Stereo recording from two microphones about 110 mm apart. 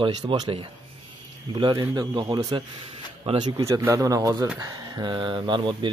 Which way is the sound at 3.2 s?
60° right (ahead or behind).